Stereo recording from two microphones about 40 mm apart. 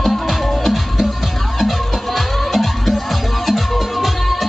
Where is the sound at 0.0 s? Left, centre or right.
Centre.